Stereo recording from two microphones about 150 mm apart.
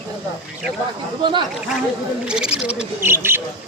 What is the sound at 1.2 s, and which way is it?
Speech, 30° right (ahead or behind).